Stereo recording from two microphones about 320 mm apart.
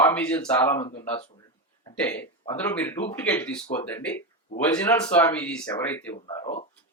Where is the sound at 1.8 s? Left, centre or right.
Centre.